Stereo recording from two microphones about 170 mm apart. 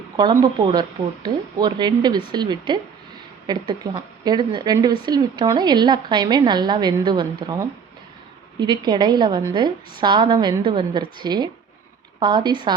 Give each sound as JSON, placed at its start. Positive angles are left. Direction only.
{"t": 0.2, "sound": "speech", "side_deg": -25}